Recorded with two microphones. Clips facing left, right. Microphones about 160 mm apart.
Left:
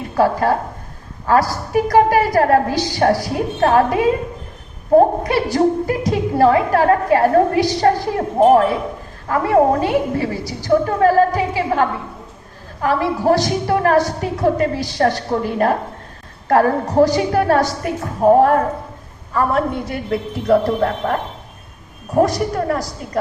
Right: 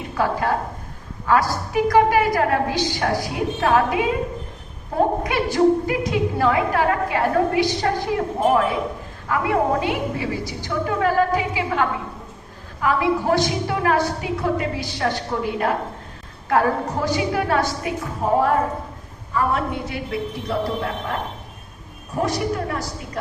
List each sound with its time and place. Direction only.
0.1 s a woman's voice: 40° left (ahead or behind)
22.2 s a woman's voice: 40° left (ahead or behind)